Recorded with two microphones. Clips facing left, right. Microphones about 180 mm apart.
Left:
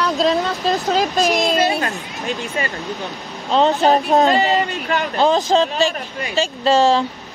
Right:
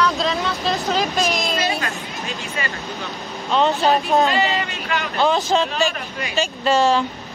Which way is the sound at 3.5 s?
35° left (ahead or behind).